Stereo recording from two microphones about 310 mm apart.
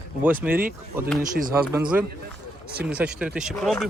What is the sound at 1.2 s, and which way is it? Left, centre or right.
Speech, right.